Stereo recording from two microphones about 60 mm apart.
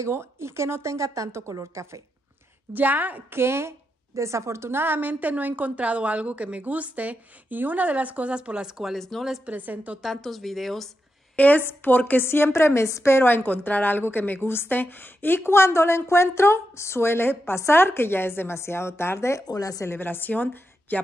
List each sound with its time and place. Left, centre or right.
0.0 s a woman's voice: right
2.7 s a woman's voice: right
3.3 s a woman's voice: right; by 8.9 s centre
8.9 s speech: centre
9.5 s a woman's voice: right
10.0 s speech: centre
11.3 s a woman's voice: left
19.4 s speech: left
19.9 s a woman's voice: left